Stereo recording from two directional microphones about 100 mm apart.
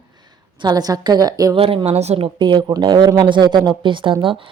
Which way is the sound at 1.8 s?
90° right.